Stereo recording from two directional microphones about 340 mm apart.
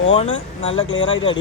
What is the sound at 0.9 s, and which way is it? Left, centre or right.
Speech, left.